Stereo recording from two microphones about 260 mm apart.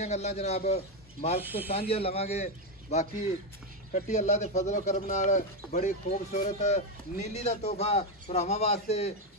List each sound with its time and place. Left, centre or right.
0.0 s speech: left
1.4 s speech: centre
1.7 s speech: left